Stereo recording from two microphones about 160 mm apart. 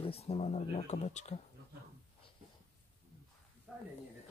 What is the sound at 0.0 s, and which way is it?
Speech, 40° left (ahead or behind).